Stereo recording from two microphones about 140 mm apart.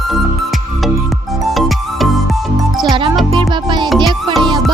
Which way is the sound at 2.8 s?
35° right (ahead or behind).